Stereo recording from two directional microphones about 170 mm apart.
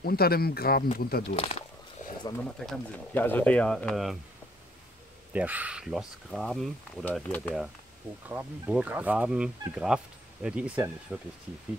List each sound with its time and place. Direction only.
0.0 s speech: 65° left (ahead or behind)
1.3 s speech: 35° left (ahead or behind)
2.6 s speech: 5° left (ahead or behind)
5.3 s speech: 10° right (ahead or behind); by 7.5 s 10° left (ahead or behind)
8.3 s speech: 10° right (ahead or behind)